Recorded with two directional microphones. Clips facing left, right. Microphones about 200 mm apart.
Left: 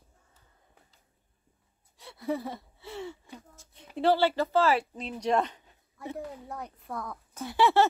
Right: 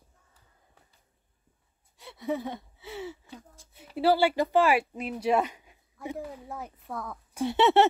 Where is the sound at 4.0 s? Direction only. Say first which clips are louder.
Right 1 dB; 10° right (ahead or behind).